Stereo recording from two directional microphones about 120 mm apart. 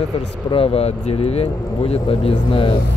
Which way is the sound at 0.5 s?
50° left (ahead or behind).